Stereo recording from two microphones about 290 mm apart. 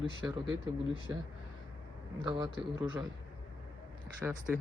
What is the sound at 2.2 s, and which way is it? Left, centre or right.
Speech, centre.